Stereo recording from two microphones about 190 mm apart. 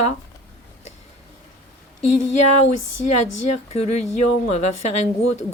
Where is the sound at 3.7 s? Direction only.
35° left (ahead or behind).